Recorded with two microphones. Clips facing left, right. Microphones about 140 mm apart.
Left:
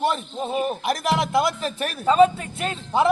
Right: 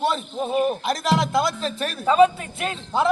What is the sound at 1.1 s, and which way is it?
Speech, 15° left (ahead or behind).